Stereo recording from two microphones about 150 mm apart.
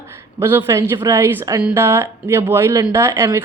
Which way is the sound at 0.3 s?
15° right (ahead or behind).